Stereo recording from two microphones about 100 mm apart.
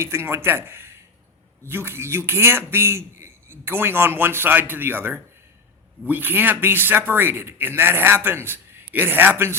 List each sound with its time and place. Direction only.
0.0 s a man's voice: 25° right (ahead or behind)